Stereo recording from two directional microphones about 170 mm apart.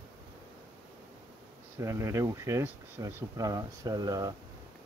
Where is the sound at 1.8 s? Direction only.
20° right (ahead or behind).